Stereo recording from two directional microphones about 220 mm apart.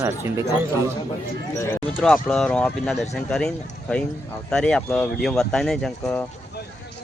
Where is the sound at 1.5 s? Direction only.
10° left (ahead or behind).